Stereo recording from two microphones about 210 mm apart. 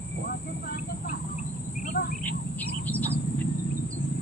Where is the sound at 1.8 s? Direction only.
45° left (ahead or behind).